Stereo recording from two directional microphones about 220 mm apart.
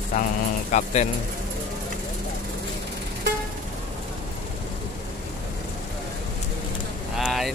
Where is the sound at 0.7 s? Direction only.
30° left (ahead or behind).